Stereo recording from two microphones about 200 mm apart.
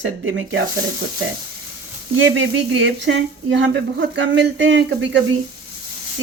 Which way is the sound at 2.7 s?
65° right (ahead or behind).